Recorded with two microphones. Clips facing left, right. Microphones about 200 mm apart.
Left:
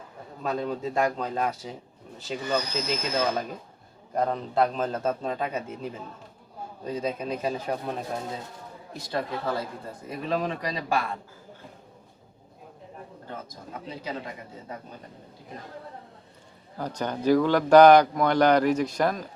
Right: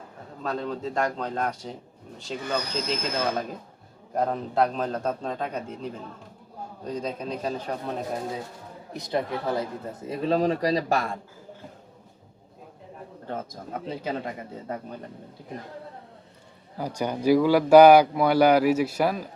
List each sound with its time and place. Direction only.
0.4 s a man's voice: 10° left (ahead or behind)
8.9 s speech: 20° right (ahead or behind); by 11.2 s 45° right (ahead or behind)
13.3 s speech: 55° right (ahead or behind)
16.7 s a man's voice: 10° right (ahead or behind)